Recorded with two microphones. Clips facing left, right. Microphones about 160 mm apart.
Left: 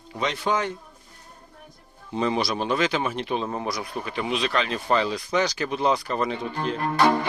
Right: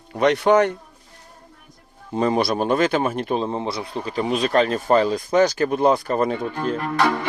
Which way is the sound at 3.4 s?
25° right (ahead or behind).